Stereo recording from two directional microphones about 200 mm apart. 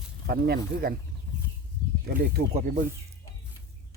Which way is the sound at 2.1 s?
50° right (ahead or behind).